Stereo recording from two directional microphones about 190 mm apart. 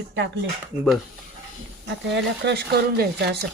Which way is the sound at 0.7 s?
10° right (ahead or behind).